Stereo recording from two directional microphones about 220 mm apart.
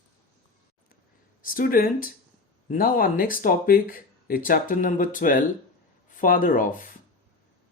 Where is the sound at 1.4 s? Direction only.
40° left (ahead or behind).